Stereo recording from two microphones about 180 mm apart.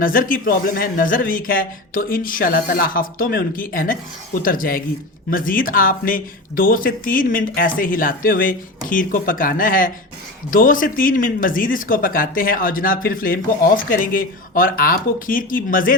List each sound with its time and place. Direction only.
0.0 s speech: 50° left (ahead or behind)